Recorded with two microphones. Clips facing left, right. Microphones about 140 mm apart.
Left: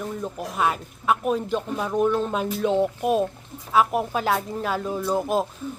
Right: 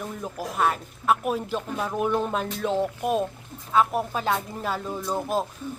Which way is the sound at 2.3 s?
5° left (ahead or behind).